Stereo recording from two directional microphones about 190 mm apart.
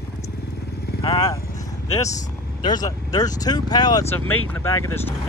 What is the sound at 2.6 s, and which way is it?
Speech, 20° left (ahead or behind).